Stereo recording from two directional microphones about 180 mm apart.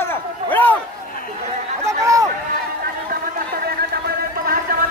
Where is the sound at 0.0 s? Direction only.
10° left (ahead or behind).